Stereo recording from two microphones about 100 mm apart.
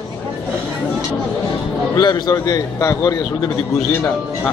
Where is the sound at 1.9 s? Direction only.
45° left (ahead or behind).